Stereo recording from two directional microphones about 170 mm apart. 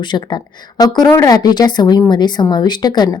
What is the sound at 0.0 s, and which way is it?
A woman's voice, 25° left (ahead or behind).